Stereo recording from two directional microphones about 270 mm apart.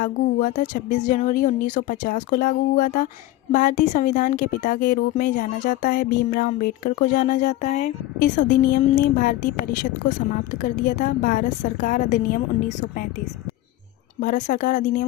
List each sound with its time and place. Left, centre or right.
0.0 s a woman's voice: left
14.2 s a woman's voice: left